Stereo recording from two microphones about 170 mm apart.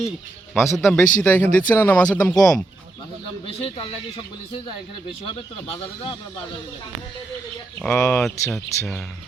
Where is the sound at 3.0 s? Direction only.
30° left (ahead or behind).